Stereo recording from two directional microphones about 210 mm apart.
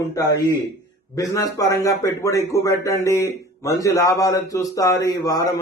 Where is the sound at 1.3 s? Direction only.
15° left (ahead or behind).